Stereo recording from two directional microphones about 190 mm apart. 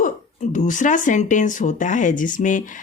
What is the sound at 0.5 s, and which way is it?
Speech, 40° left (ahead or behind).